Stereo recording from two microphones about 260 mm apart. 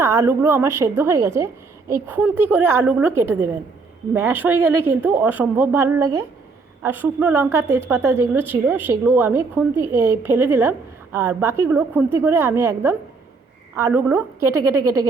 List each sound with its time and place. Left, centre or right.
0.0 s a woman's voice: centre
4.1 s a woman's voice: centre
4.7 s speech: right
5.0 s a woman's voice: centre
14.4 s speech: right